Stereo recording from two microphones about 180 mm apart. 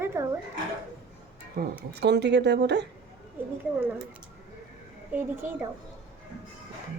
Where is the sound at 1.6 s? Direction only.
50° right (ahead or behind).